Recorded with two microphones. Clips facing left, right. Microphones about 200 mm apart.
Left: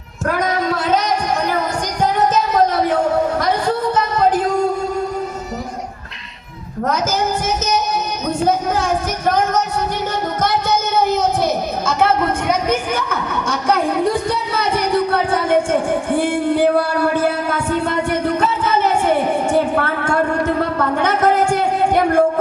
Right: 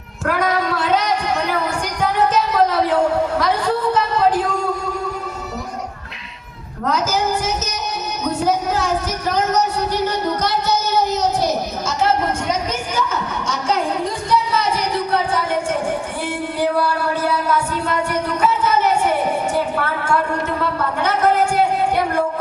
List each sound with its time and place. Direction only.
0.3 s singing: 45° left (ahead or behind)
8.4 s music: 50° left (ahead or behind)
19.5 s a sound: 50° left (ahead or behind)